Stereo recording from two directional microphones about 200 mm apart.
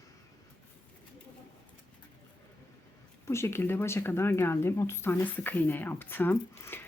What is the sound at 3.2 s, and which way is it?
Speech, 15° left (ahead or behind).